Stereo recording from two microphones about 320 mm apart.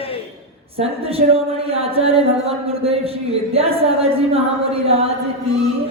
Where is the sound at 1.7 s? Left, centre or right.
Centre.